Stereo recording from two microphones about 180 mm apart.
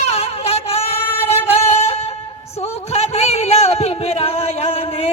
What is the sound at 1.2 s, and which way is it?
Music, 35° left (ahead or behind).